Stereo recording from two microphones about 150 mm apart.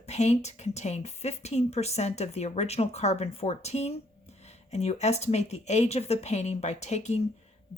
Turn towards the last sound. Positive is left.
turn(degrees=50)  # may be behind; listen again after turning